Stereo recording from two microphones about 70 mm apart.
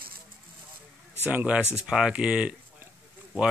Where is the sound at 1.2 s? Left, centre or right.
Right.